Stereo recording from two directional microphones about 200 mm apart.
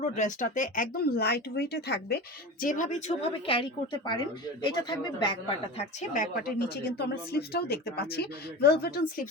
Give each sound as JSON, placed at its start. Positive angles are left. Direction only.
{"t": 0.0, "sound": "speech", "side_deg": 40}
{"t": 3.4, "sound": "a woman's voice", "side_deg": 25}
{"t": 6.4, "sound": "speech", "side_deg": 55}